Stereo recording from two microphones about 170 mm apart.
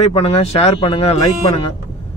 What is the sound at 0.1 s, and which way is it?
A man's voice, 35° left (ahead or behind).